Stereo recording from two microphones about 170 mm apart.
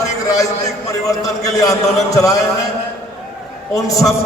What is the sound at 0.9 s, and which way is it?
Speech, 20° left (ahead or behind).